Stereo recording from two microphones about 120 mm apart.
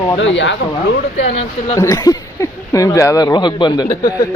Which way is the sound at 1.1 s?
70° left (ahead or behind).